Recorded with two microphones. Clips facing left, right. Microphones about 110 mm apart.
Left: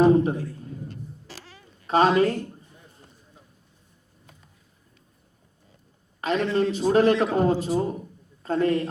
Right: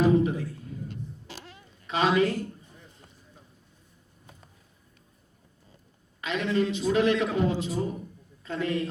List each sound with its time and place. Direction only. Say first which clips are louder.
0.0 s a sound: left 4 dB; 40° left (ahead or behind)
1.9 s a woman's voice: left 5 dB; 40° left (ahead or behind)
6.2 s a man's voice: left 4 dB; 40° left (ahead or behind)